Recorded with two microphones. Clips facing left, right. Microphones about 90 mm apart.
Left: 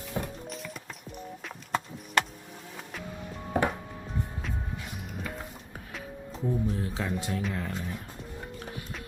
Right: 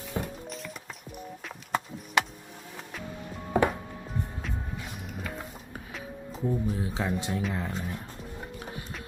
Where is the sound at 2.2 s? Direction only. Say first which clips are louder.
Even; 5° right (ahead or behind).